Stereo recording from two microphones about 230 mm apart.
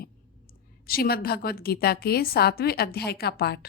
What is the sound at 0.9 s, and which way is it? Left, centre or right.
A woman's voice, left.